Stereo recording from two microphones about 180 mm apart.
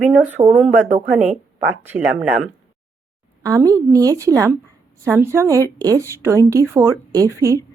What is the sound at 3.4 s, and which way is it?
A woman's voice, 20° right (ahead or behind).